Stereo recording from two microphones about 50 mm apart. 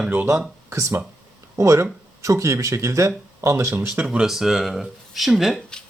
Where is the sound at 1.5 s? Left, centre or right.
Right.